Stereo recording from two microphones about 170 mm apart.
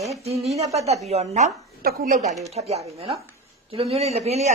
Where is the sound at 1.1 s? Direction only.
40° right (ahead or behind).